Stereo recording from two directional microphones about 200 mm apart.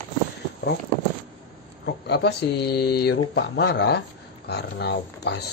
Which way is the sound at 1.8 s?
55° left (ahead or behind).